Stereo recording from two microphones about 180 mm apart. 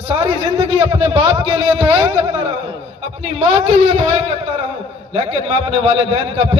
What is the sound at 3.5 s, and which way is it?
Speech, 30° right (ahead or behind).